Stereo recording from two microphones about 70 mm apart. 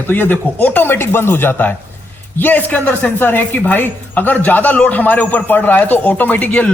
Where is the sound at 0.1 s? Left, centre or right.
Left.